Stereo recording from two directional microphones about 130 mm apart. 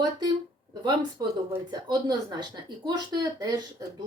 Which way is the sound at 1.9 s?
35° right (ahead or behind).